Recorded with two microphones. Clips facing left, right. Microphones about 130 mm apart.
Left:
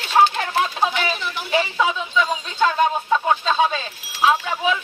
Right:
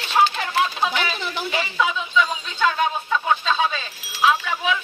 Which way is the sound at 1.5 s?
35° left (ahead or behind).